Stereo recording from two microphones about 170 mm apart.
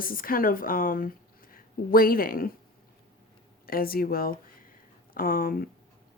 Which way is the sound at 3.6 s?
60° left (ahead or behind).